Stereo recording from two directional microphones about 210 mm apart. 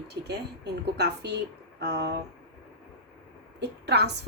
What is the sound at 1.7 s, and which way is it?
Speech, 55° right (ahead or behind).